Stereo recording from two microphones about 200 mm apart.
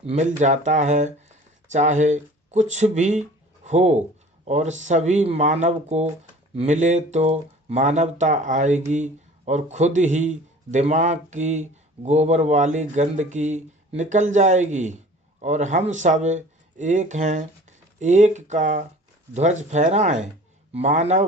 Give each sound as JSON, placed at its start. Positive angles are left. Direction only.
{"t": 0.0, "sound": "speech", "side_deg": -30}